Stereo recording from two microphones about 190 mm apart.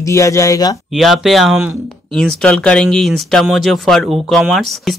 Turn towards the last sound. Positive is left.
turn(degrees=0)  # may be behind; listen again after turning